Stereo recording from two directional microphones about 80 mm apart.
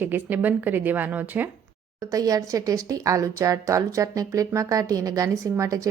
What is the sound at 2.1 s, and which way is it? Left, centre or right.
A woman's voice, right.